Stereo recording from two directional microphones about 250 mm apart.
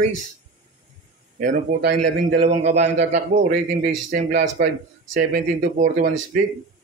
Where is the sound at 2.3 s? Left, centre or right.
Right.